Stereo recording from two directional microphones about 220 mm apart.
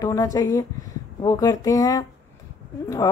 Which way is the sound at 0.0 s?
15° left (ahead or behind).